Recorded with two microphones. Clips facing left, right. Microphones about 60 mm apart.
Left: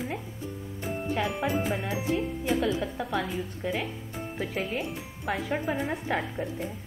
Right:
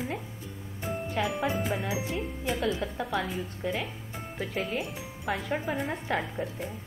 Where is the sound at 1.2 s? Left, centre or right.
Centre.